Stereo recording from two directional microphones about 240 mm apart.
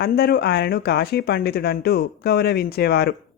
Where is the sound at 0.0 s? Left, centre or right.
Left.